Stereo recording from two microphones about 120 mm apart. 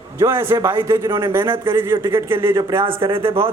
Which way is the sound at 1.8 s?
20° right (ahead or behind).